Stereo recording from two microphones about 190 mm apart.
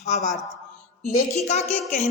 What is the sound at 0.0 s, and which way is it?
Speech, 35° left (ahead or behind).